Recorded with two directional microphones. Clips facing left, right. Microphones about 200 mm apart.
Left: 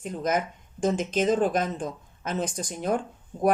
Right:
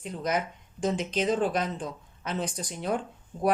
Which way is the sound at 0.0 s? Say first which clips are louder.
Left 3 dB; 45° left (ahead or behind).